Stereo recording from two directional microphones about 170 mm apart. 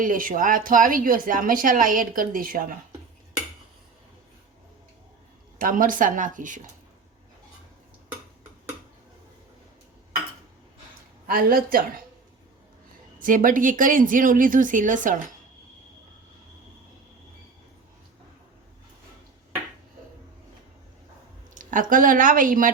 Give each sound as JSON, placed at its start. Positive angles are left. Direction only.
{"t": 0.0, "sound": "speech", "side_deg": -50}
{"t": 5.5, "sound": "speech", "side_deg": -55}
{"t": 11.3, "sound": "a woman's voice", "side_deg": -60}
{"t": 13.1, "sound": "speech", "side_deg": -55}
{"t": 21.5, "sound": "speech", "side_deg": -50}